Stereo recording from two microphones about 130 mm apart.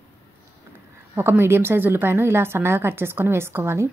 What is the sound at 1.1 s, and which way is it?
A woman's voice, 15° right (ahead or behind).